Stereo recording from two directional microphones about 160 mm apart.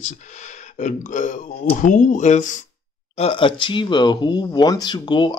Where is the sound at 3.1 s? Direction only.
40° left (ahead or behind).